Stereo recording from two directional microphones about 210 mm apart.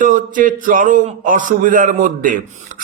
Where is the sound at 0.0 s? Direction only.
40° right (ahead or behind).